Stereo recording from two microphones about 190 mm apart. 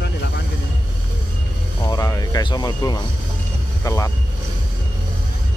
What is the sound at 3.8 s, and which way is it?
Vehicle, 15° left (ahead or behind).